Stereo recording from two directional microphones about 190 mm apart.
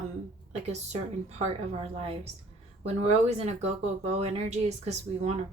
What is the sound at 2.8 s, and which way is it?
Speech, 35° right (ahead or behind).